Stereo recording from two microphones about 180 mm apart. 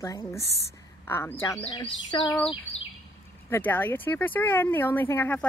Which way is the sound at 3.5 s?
10° left (ahead or behind).